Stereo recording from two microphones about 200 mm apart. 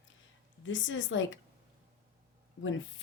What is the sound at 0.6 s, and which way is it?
Speech, 70° left (ahead or behind).